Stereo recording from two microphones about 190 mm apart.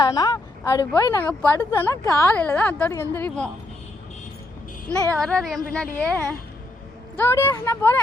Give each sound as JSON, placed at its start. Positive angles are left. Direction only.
{"t": 0.0, "sound": "a sound", "side_deg": 20}
{"t": 0.9, "sound": "a woman's voice", "side_deg": 10}
{"t": 5.1, "sound": "a woman's voice", "side_deg": 5}
{"t": 7.2, "sound": "a woman's voice", "side_deg": 15}